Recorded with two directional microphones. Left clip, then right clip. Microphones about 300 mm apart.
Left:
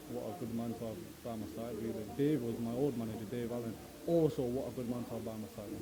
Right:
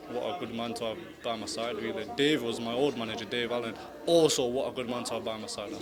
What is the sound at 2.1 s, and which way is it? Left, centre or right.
A man's voice, centre.